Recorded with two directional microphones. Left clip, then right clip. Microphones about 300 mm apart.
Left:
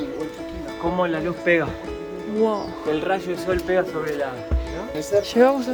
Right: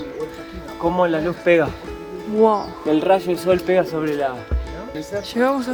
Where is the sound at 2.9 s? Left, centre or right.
Right.